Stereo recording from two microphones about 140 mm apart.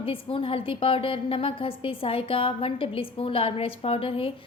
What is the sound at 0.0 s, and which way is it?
A woman's voice, 40° left (ahead or behind).